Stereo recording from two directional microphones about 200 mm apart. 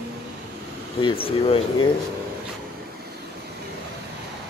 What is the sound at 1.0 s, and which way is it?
Speech, 30° left (ahead or behind).